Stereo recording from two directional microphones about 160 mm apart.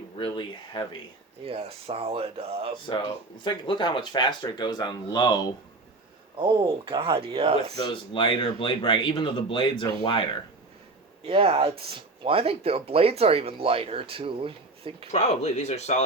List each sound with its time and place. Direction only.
0.2 s speech: 30° left (ahead or behind)
1.5 s speech: 35° right (ahead or behind)
3.4 s speech: 30° left (ahead or behind)
6.4 s speech: 30° right (ahead or behind)
7.8 s speech: 30° left (ahead or behind)
11.3 s speech: 35° right (ahead or behind)
15.1 s speech: 45° left (ahead or behind)